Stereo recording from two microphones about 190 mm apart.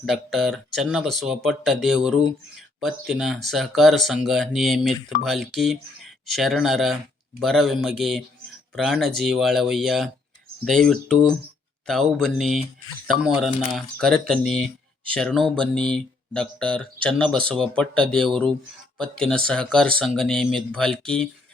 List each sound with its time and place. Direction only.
0.0 s speech: centre (ahead or behind)